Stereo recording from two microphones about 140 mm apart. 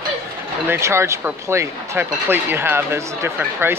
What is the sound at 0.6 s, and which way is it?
Speech, 20° right (ahead or behind).